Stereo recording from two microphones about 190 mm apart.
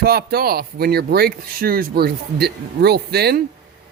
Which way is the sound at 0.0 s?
55° right (ahead or behind).